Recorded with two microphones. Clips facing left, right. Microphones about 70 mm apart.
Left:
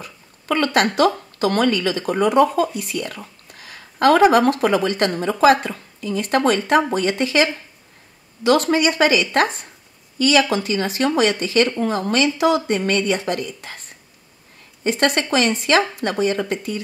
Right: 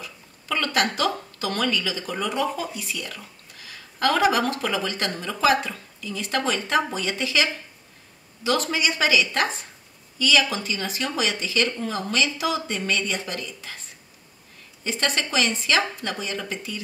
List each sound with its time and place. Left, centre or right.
0.0 s a sound: left
1.4 s speech: left
8.5 s speech: left
14.8 s speech: left